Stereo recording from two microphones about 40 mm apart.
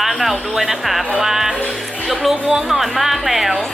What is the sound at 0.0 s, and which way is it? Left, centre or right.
Speech, centre.